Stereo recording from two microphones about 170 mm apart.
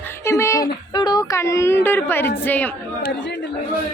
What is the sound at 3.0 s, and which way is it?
Speech, 90° left.